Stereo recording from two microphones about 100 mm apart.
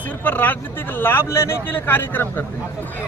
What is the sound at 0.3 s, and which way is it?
Speech, 20° left (ahead or behind).